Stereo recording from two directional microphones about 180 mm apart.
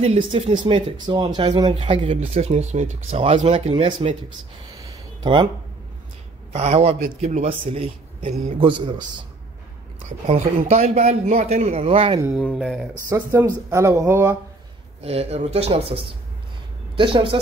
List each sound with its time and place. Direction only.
0.0 s speech: 30° right (ahead or behind)
4.7 s a sound: 20° right (ahead or behind)
6.5 s a man's voice: 35° right (ahead or behind)
10.0 s speech: 40° right (ahead or behind)
12.4 s speech: centre (ahead or behind)
13.1 s speech: 15° right (ahead or behind)
15.0 s a woman's voice: 35° right (ahead or behind)